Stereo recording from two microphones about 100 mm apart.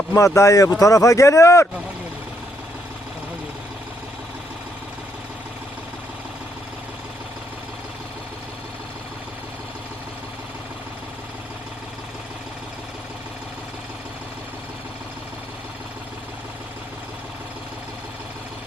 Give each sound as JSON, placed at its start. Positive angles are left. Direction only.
{"t": 0.1, "sound": "speech", "side_deg": 30}